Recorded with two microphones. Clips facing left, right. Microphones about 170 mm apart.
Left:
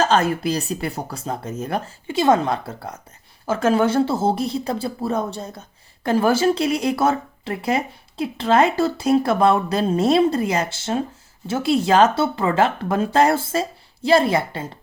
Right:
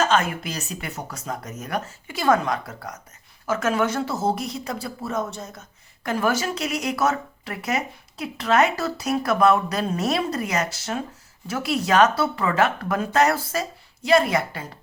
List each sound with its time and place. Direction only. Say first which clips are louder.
0.0 s speech: left 4 dB; 35° left (ahead or behind)